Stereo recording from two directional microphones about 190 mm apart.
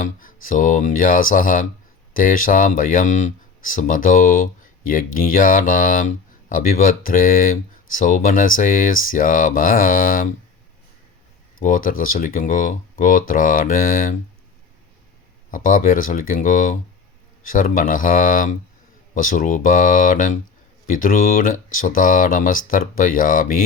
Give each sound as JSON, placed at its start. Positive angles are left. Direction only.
{"t": 0.0, "sound": "a sound", "side_deg": 45}
{"t": 0.4, "sound": "speech", "side_deg": 45}
{"t": 11.6, "sound": "speech", "side_deg": 45}
{"t": 15.5, "sound": "speech", "side_deg": 45}